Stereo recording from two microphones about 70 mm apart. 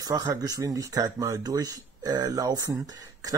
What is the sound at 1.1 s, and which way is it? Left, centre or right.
Speech, right.